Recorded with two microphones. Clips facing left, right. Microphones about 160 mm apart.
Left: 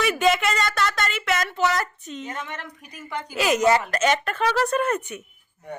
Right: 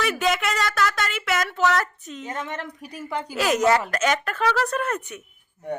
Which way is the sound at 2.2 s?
35° right (ahead or behind).